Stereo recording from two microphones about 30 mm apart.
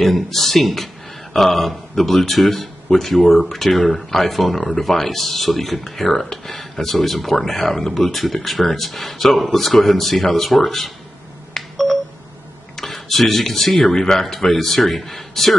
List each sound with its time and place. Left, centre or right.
0.0 s a man's voice: centre
11.5 s telephone dialing: centre
12.7 s a man's voice: centre